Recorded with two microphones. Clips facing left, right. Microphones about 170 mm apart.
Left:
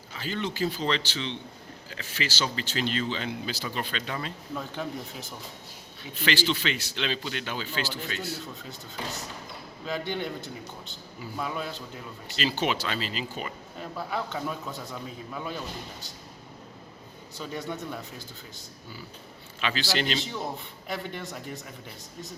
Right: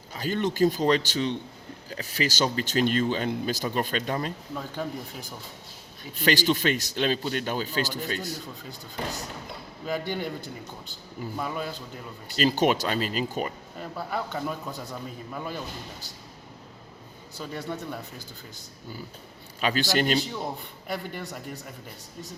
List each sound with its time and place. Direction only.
0.1 s speech: 45° right (ahead or behind)
6.1 s speech: 45° right (ahead or behind)
9.8 s a man's voice: 5° right (ahead or behind)
11.3 s a man's voice: centre (ahead or behind)
12.4 s speech: 45° right (ahead or behind)
13.7 s a man's voice: centre (ahead or behind)
17.3 s a man's voice: 5° right (ahead or behind)
19.6 s speech: 45° right (ahead or behind)
20.2 s a man's voice: centre (ahead or behind)